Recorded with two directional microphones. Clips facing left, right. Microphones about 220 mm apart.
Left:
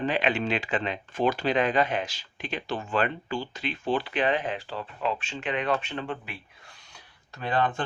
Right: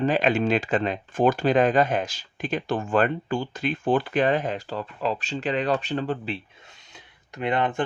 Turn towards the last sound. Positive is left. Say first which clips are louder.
# right 3 dB
turn(degrees=-20)  # may be behind; listen again after turning